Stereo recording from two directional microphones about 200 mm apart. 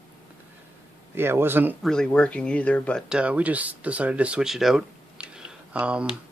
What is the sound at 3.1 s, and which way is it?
Speech, 5° right (ahead or behind).